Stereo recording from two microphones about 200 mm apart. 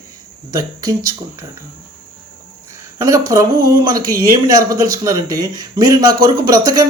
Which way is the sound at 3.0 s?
15° right (ahead or behind).